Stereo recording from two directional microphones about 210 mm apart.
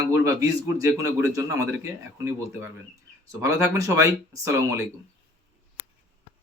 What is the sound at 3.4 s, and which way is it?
A man's voice, 15° right (ahead or behind).